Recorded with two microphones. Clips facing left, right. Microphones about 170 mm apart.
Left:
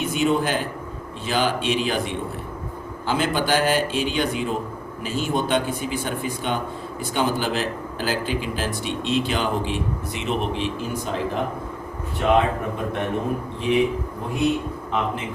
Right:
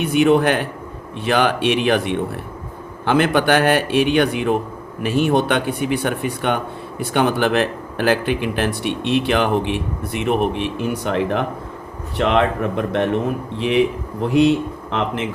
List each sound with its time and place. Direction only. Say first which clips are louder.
0.0 s speech: right 7 dB; 65° right (ahead or behind)
12.1 s speech: right 2 dB; 80° right
14.2 s speech: right 8 dB; 80° right